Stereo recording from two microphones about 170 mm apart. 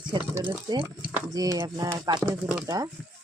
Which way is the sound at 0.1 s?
20° right (ahead or behind).